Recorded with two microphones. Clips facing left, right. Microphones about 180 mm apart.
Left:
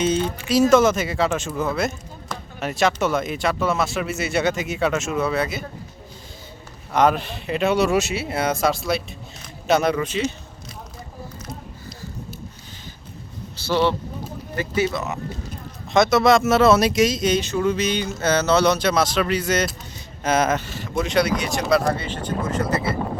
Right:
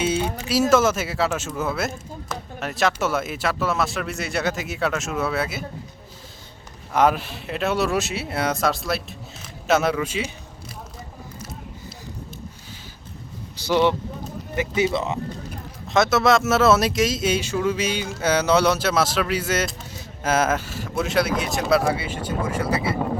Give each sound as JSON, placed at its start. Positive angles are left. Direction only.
{"t": 0.0, "sound": "a sound", "side_deg": -10}
{"t": 0.4, "sound": "speech", "side_deg": -5}
{"t": 6.9, "sound": "speech", "side_deg": -5}
{"t": 13.6, "sound": "speech", "side_deg": -15}
{"t": 15.9, "sound": "speech", "side_deg": 0}